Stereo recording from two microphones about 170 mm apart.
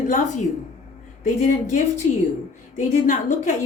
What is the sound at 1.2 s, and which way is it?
Speech, 45° left (ahead or behind).